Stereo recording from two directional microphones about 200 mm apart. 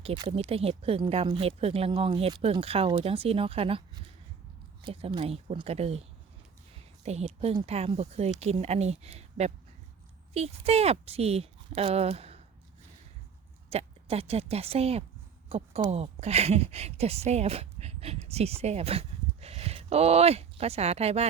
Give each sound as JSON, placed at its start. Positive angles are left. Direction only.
{"t": 0.0, "sound": "speech", "side_deg": -30}
{"t": 13.7, "sound": "speech", "side_deg": -30}